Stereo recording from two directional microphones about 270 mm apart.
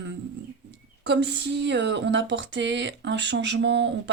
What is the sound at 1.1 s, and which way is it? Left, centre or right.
Speech, right.